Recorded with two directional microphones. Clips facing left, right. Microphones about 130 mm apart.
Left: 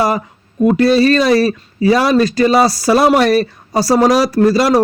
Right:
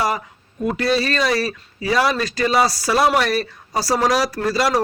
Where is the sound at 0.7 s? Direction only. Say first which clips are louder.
Left 9 dB; 35° left (ahead or behind).